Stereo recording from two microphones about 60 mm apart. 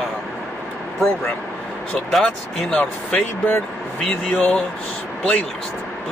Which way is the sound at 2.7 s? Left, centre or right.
Centre.